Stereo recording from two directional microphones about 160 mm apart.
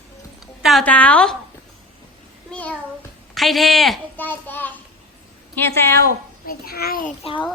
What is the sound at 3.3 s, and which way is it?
Speech, centre (ahead or behind).